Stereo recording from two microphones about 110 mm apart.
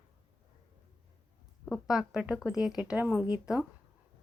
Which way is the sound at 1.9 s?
5° right (ahead or behind).